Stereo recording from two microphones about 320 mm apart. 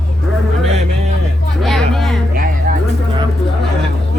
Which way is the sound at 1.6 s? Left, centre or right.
Centre.